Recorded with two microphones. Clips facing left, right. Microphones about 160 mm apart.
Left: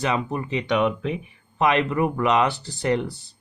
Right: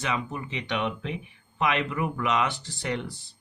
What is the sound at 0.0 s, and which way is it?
Speech, 40° left (ahead or behind).